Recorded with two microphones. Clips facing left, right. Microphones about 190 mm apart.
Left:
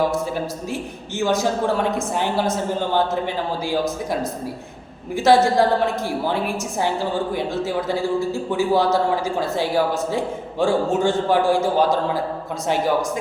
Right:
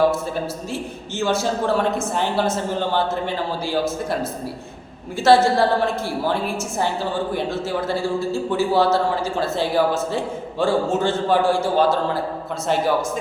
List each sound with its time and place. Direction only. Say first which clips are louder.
1.2 s a man's voice: left 1 dB; 15° left (ahead or behind)
7.3 s a man's voice: left 1 dB; 15° left (ahead or behind)